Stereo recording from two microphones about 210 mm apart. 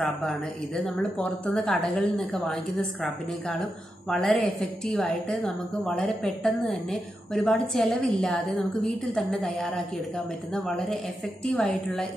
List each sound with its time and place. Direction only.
0.0 s a woman's voice: centre (ahead or behind)